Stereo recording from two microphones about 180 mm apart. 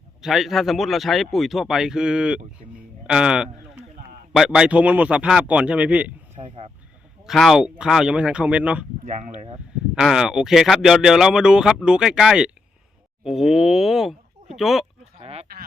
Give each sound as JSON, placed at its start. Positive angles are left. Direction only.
{"t": 0.2, "sound": "a man's voice", "side_deg": 0}
{"t": 6.3, "sound": "a sound", "side_deg": -35}
{"t": 7.3, "sound": "speech", "side_deg": 0}
{"t": 9.0, "sound": "speech", "side_deg": -40}
{"t": 9.9, "sound": "speech", "side_deg": -5}
{"t": 15.2, "sound": "a sound", "side_deg": -35}